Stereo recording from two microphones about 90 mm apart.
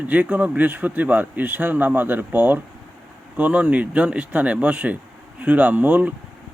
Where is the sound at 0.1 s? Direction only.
15° right (ahead or behind).